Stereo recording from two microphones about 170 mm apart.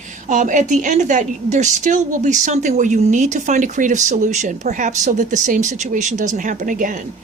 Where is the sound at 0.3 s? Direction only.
45° right (ahead or behind).